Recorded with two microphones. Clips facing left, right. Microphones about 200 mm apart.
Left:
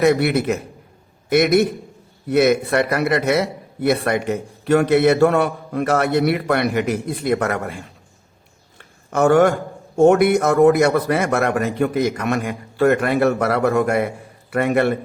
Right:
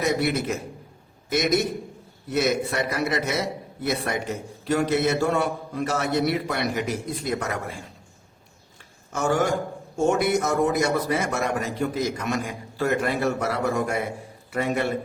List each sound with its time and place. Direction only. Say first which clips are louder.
0.0 s a man's voice: left 7 dB; 65° left (ahead or behind)
9.0 s a man's voice: left 9 dB; 60° left (ahead or behind)